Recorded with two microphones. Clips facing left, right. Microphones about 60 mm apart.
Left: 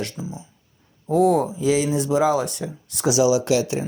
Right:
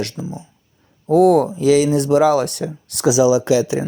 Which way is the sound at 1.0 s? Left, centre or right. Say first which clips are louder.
Right 5 dB; right.